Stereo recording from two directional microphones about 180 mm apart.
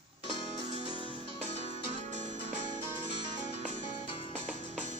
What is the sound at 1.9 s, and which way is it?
Music, 40° right (ahead or behind).